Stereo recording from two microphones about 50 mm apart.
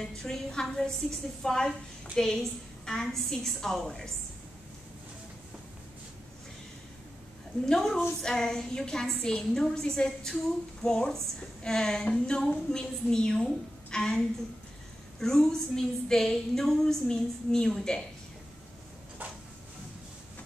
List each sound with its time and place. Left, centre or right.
0.0 s a woman's voice: centre
7.6 s a woman's voice: centre